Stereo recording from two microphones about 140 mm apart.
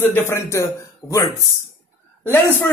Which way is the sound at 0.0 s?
15° left (ahead or behind).